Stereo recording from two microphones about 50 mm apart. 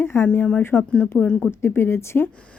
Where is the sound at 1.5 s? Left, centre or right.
Left.